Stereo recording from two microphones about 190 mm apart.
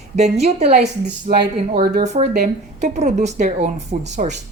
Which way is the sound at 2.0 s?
35° right (ahead or behind).